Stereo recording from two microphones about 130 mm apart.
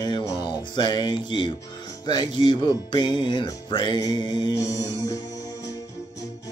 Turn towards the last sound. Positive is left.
turn(degrees=30)  # may be behind; listen again after turning